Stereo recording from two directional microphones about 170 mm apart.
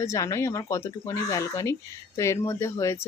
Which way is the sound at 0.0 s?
15° left (ahead or behind).